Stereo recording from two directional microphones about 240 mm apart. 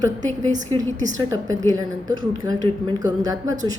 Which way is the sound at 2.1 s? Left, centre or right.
Centre.